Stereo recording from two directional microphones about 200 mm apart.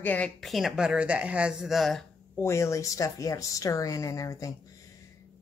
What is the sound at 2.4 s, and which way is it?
Speech, 15° left (ahead or behind).